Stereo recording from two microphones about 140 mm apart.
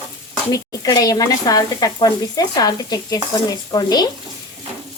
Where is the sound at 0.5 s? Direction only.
25° left (ahead or behind).